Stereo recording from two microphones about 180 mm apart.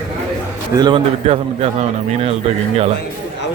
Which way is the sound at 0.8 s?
25° right (ahead or behind).